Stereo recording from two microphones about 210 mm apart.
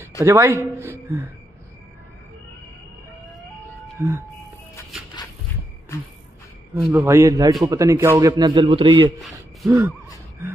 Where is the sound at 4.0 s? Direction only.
15° right (ahead or behind).